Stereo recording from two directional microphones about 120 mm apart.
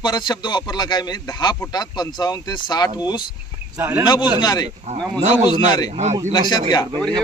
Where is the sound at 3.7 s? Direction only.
20° right (ahead or behind).